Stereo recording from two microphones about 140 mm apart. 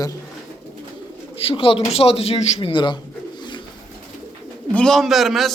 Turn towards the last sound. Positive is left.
turn(degrees=0)  # may be behind; listen again after turning